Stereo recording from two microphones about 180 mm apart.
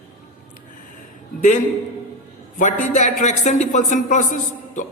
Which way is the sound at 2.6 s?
45° left (ahead or behind).